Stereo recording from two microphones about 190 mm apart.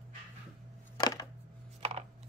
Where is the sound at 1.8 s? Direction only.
30° right (ahead or behind).